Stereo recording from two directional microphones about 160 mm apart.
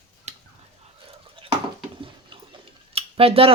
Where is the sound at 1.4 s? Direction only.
35° right (ahead or behind).